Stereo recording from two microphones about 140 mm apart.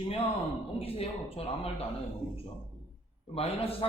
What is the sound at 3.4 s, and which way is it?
Speech, 45° left (ahead or behind).